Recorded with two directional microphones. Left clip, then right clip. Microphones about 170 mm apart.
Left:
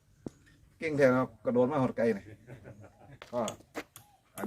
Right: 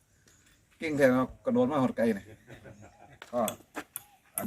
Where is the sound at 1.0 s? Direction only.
50° left (ahead or behind).